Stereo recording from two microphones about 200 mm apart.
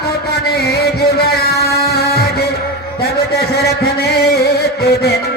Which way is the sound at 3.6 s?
50° left (ahead or behind).